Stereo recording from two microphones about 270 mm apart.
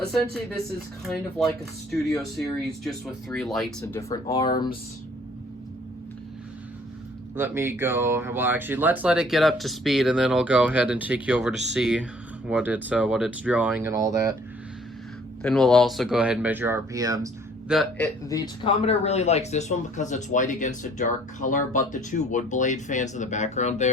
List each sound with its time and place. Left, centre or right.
1.0 s speech: centre
3.8 s speech: centre
7.3 s speech: centre
15.4 s speech: centre
17.7 s a man's voice: centre; by 23.9 s left